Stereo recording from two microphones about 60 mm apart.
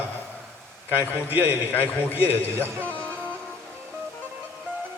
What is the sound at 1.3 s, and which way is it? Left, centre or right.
Speech, right.